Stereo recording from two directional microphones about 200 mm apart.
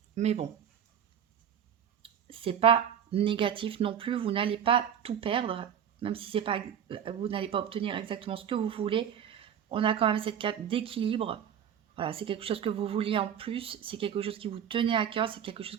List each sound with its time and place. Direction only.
0.2 s speech: 30° right (ahead or behind)
2.0 s speech: 25° right (ahead or behind)